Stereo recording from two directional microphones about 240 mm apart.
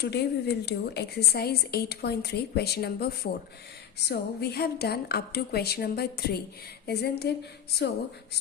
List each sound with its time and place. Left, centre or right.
0.0 s a woman's voice: left